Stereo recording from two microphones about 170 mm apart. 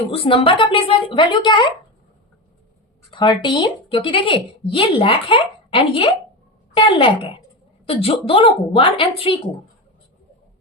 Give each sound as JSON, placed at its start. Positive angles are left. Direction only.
{"t": 0.1, "sound": "speech", "side_deg": 30}
{"t": 3.1, "sound": "a woman's voice", "side_deg": 25}